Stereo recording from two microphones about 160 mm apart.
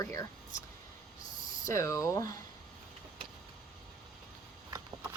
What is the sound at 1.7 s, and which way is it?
Speech, 20° left (ahead or behind).